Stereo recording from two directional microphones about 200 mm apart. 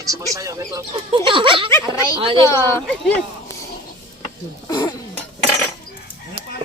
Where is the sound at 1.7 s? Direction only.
15° left (ahead or behind).